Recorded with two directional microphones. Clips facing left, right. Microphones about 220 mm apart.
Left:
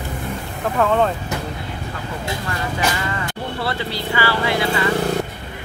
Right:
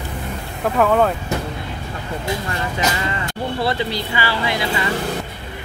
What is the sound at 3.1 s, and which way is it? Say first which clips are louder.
Speech: right 2 dB; 15° right (ahead or behind).